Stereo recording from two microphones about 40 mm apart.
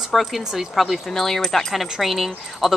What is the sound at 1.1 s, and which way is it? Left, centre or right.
Speech, centre.